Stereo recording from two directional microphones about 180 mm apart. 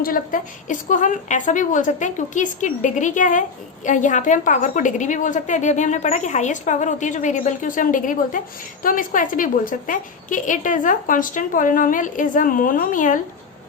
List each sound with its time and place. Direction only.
0.0 s a woman's voice: 50° left (ahead or behind)